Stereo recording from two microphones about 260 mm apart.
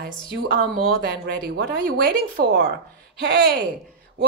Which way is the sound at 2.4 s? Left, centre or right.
Right.